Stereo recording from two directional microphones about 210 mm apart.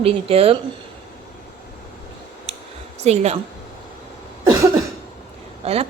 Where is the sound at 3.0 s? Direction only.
30° right (ahead or behind).